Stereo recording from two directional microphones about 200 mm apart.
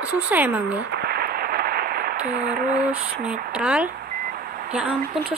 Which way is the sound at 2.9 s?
5° right (ahead or behind).